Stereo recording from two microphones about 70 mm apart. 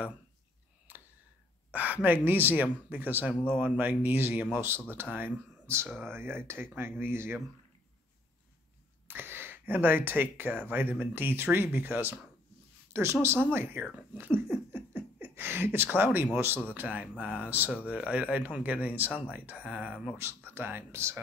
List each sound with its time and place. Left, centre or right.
1.7 s a man's voice: right
9.0 s a man's voice: right
15.0 s a sound: right
16.7 s a man's voice: right
20.2 s speech: right